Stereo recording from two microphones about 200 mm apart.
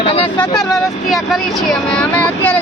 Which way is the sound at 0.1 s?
25° left (ahead or behind).